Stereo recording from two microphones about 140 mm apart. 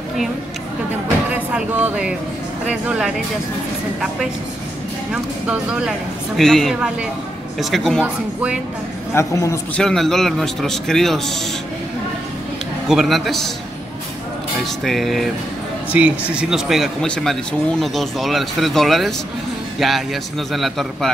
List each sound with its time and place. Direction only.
1.3 s speech: 10° right (ahead or behind)
5.1 s speech: 5° right (ahead or behind)
8.0 s speech: 10° right (ahead or behind)
9.1 s a man's voice: 20° left (ahead or behind)
9.8 s speech: 5° left (ahead or behind)
12.8 s speech: centre (ahead or behind)
14.8 s speech: centre (ahead or behind)
15.9 s speech: 10° right (ahead or behind)